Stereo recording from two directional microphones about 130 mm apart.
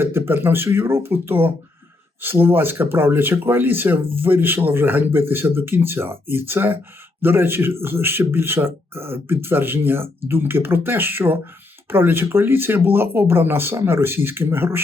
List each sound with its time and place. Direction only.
0.0 s speech: 15° right (ahead or behind)